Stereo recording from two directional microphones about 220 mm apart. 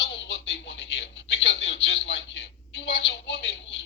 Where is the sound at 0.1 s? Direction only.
50° left (ahead or behind).